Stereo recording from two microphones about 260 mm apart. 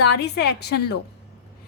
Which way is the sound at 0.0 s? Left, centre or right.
Left.